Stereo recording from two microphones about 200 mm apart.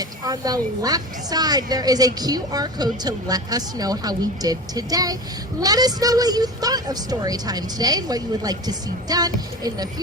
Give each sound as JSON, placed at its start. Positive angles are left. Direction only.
{"t": 0.3, "sound": "a woman's voice", "side_deg": -20}